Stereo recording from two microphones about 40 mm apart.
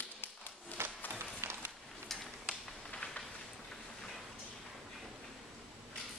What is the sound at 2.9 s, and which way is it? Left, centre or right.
Rain on surface, left.